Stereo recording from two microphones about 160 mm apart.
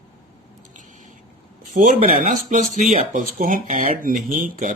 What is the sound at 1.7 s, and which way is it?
Speech, 50° right (ahead or behind).